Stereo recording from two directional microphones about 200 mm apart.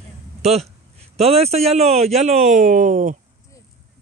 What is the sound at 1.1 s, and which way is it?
Speech, 30° right (ahead or behind).